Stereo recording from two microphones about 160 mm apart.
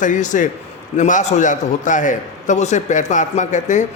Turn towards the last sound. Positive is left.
turn(degrees=50)  # may be behind; listen again after turning